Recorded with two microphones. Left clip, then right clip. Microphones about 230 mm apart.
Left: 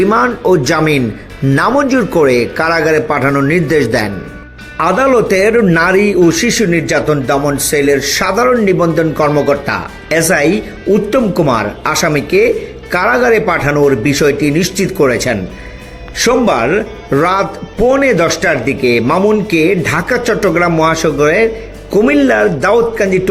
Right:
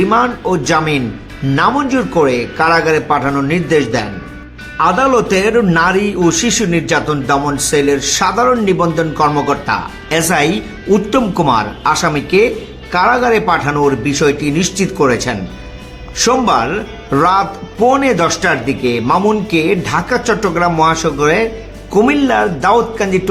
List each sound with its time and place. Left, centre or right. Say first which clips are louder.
0.0 s speech: left 2 dB; left